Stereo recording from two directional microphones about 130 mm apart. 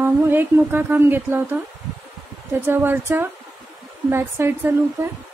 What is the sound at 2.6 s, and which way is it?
Speech, 15° right (ahead or behind).